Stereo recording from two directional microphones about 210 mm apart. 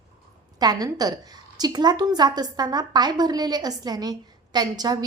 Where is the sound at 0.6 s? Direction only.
20° right (ahead or behind).